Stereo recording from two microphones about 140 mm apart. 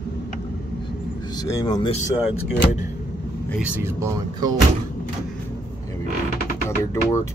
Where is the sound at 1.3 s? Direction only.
25° left (ahead or behind).